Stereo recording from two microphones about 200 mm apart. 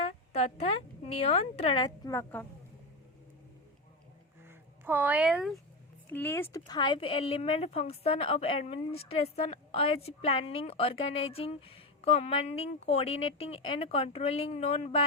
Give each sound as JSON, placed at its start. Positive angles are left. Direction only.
{"t": 0.0, "sound": "a sound", "side_deg": 30}
{"t": 1.2, "sound": "speech", "side_deg": 30}
{"t": 2.1, "sound": "speech", "side_deg": 5}
{"t": 4.4, "sound": "speech", "side_deg": -10}
{"t": 6.1, "sound": "speech", "side_deg": 10}